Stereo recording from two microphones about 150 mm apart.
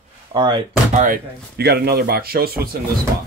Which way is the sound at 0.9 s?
65° right (ahead or behind).